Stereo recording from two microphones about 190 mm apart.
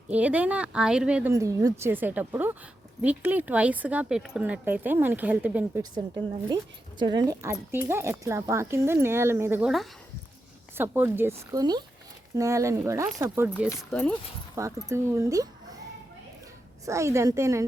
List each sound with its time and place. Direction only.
0.1 s speech: 5° right (ahead or behind)
7.0 s speech: 20° right (ahead or behind)
13.7 s speech: 10° left (ahead or behind)
14.5 s speech: 15° right (ahead or behind)
16.8 s speech: 15° right (ahead or behind)